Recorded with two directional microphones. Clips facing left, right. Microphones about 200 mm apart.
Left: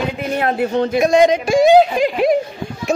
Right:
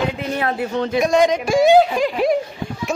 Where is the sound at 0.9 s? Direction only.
20° left (ahead or behind).